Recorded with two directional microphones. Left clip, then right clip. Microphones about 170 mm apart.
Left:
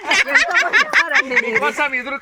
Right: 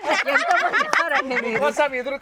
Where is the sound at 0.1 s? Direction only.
65° right (ahead or behind).